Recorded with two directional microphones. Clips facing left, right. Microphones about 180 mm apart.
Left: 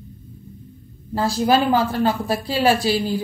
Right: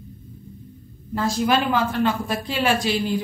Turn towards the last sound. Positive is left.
turn(degrees=35)  # may be behind; listen again after turning